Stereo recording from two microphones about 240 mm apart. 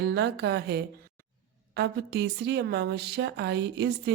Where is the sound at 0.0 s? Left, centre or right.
Right.